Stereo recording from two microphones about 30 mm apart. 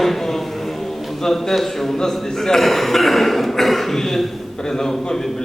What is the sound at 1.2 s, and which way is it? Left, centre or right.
A man's voice, centre.